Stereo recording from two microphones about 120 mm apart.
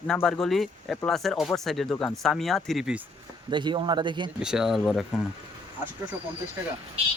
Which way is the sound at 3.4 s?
40° right (ahead or behind).